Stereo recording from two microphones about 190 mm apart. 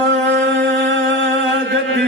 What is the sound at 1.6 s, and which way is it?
Mantra, 70° right (ahead or behind).